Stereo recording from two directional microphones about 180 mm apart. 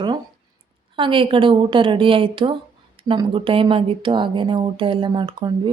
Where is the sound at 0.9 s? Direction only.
30° right (ahead or behind).